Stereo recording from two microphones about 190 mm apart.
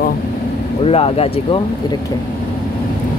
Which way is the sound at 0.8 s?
30° left (ahead or behind).